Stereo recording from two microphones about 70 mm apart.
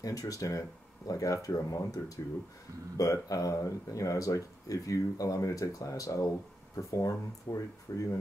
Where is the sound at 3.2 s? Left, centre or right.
Left.